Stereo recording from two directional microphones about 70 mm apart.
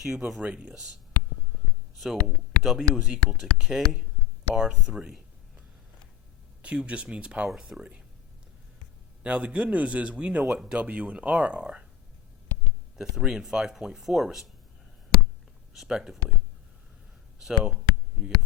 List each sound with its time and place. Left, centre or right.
0.0 s speech: centre
0.4 s speech: centre
2.0 s speech: centre
6.6 s speech: centre
9.2 s speech: centre
13.0 s speech: centre
15.7 s speech: centre
17.4 s speech: centre